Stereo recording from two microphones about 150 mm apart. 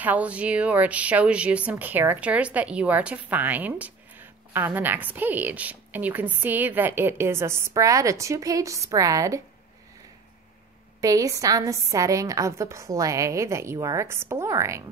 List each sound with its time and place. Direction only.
0.0 s speech: 10° right (ahead or behind)
11.0 s a woman's voice: 20° right (ahead or behind)